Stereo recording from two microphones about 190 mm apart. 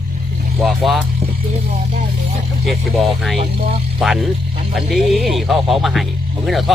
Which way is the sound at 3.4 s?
35° right (ahead or behind).